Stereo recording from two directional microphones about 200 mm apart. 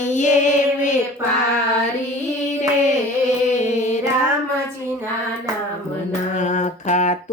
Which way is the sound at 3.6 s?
35° left (ahead or behind).